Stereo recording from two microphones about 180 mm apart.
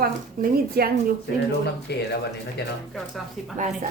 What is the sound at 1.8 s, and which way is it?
Speech, 65° left (ahead or behind).